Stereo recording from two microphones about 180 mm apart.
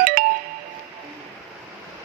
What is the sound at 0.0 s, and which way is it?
Music, 50° right (ahead or behind).